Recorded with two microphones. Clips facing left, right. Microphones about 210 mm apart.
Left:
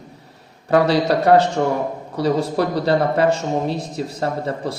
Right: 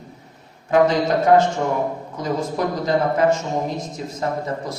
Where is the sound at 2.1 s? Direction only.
35° left (ahead or behind).